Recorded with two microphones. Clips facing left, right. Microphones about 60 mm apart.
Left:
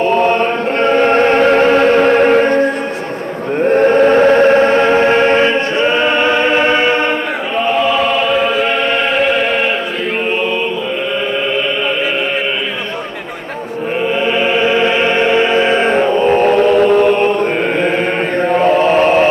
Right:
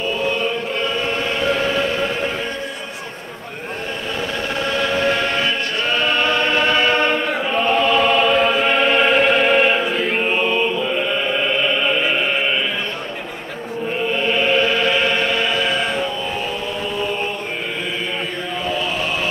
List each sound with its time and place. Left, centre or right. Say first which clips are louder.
0.0 s chant: left 9 dB; left
0.8 s choir: left 15 dB; left; by 7.2 s centre
7.5 s choir: left 3 dB; centre
14.2 s music: left 3 dB; centre; by 17.3 s left
18.5 s chant: left 13 dB; left